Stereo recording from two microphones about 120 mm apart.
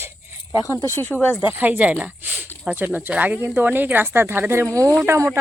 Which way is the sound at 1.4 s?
15° right (ahead or behind).